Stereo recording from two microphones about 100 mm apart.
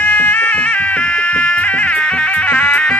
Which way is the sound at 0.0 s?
10° left (ahead or behind).